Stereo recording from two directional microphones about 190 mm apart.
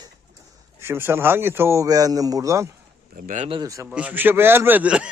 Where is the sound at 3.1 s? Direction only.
45° right (ahead or behind).